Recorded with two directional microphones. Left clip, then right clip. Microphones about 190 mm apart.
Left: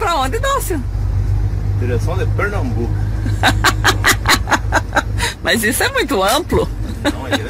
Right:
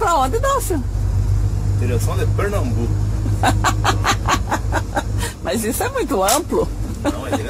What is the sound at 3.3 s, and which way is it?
Speech, centre (ahead or behind).